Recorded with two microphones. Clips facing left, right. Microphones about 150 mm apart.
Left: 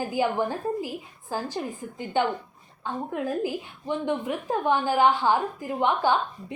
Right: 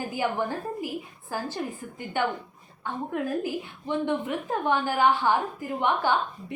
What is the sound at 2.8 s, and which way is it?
A woman's voice, 15° left (ahead or behind).